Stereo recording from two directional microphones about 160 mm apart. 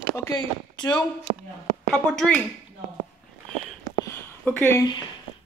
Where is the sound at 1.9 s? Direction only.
Centre (ahead or behind).